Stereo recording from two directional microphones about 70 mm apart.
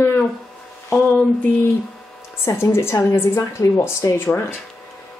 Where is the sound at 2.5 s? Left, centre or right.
Left.